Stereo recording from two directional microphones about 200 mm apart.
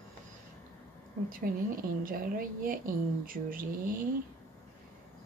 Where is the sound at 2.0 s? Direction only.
45° right (ahead or behind).